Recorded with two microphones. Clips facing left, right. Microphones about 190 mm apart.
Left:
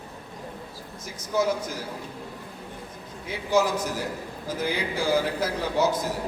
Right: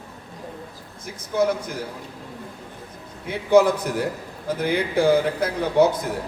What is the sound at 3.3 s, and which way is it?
A man's voice, 60° right (ahead or behind).